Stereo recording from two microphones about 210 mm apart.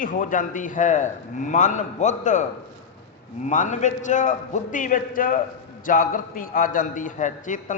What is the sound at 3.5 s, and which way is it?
Speech, 35° left (ahead or behind).